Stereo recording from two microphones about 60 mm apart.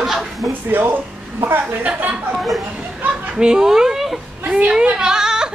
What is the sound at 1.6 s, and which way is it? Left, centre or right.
Speech, right.